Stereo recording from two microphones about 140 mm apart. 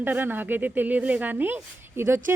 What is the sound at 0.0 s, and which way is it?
Speech, 15° right (ahead or behind).